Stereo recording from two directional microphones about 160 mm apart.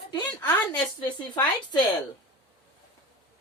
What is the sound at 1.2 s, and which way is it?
Speech, 25° left (ahead or behind).